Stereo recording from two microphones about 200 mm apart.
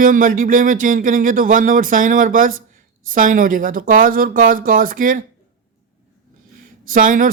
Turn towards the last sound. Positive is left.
turn(degrees=-40)  # may be behind; listen again after turning